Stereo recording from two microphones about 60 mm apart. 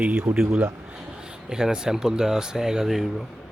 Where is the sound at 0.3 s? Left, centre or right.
Centre.